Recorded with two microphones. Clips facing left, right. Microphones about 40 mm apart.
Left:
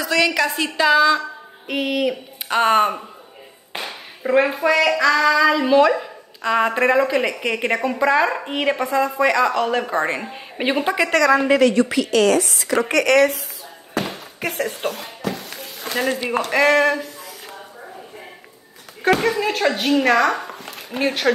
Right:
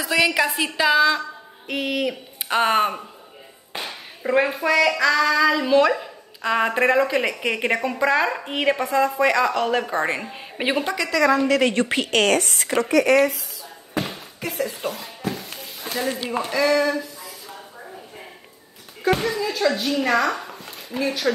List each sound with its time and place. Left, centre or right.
0.0 s a woman's voice: centre
10.8 s a woman's voice: centre
11.1 s speech: left
11.9 s a woman's voice: right
12.8 s speech: left
15.9 s a sound: left
16.3 s speech: left
19.2 s speech: left